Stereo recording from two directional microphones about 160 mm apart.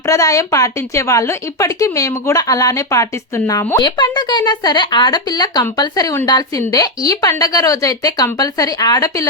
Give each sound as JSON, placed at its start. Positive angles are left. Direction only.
{"t": 0.0, "sound": "a woman's voice", "side_deg": 20}